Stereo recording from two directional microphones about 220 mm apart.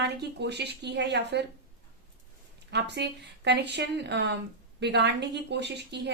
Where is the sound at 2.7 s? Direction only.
50° right (ahead or behind).